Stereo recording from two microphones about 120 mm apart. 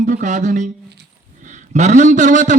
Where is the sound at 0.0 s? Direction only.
90° right.